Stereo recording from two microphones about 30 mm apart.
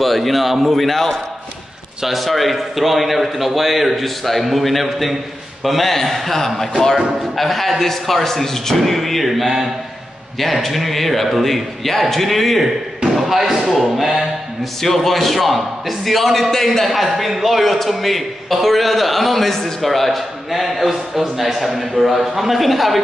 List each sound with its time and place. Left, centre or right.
0.0 s a man's voice: centre
2.0 s a man's voice: centre
13.0 s slam: right
13.4 s a sound: centre
13.7 s a sound: centre
14.8 s a man's voice: centre
16.9 s a man's voice: centre